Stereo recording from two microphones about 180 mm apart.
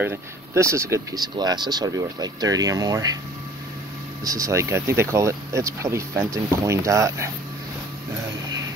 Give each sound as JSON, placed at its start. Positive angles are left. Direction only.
{"t": 0.0, "sound": "speech", "side_deg": -15}
{"t": 4.2, "sound": "speech", "side_deg": -20}